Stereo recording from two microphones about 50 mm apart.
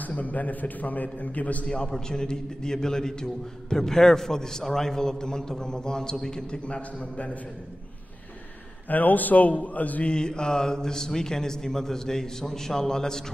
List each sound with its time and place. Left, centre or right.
0.0 s a man's voice: left
1.7 s a man's voice: centre
8.8 s a man's voice: left
10.1 s a man's voice: centre